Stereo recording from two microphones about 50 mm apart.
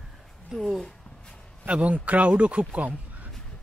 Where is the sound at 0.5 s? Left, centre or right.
Centre.